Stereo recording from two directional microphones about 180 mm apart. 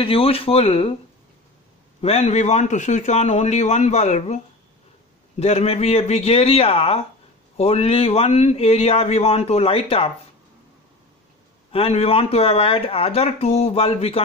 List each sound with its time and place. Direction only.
0.0 s speech: 30° left (ahead or behind)
2.0 s speech: 35° left (ahead or behind)
5.4 s speech: 35° left (ahead or behind)
11.7 s speech: 30° left (ahead or behind)